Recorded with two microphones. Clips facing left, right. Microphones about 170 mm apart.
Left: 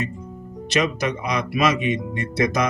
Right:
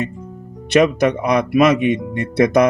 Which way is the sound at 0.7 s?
60° right (ahead or behind).